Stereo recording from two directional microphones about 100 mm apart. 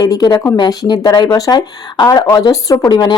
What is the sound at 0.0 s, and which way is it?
A woman's voice, 40° left (ahead or behind).